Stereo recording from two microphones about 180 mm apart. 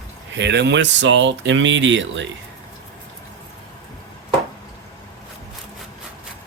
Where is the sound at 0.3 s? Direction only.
70° right (ahead or behind); by 2.2 s 90° right.